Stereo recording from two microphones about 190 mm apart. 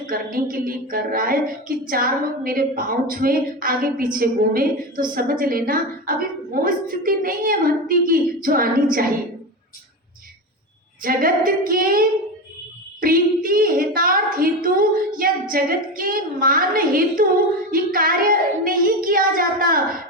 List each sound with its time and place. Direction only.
0.1 s a woman's voice: 50° right (ahead or behind)
11.0 s a woman's voice: 50° right (ahead or behind)